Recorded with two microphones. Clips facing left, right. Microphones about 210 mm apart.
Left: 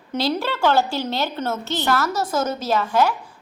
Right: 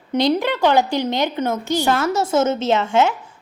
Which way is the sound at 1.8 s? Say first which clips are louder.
Right 1 dB; 25° right (ahead or behind).